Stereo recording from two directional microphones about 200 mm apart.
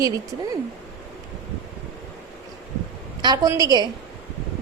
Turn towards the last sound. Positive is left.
turn(degrees=-20)  # may be behind; listen again after turning